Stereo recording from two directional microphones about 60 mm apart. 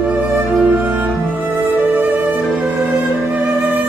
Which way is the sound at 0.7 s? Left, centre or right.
Right.